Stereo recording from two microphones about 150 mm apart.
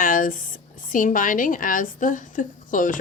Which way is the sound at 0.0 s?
65° left (ahead or behind).